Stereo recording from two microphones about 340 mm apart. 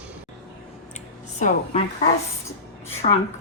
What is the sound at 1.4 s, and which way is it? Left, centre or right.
Speech, left.